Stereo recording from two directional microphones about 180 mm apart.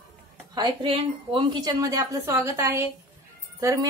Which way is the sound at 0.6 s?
30° right (ahead or behind).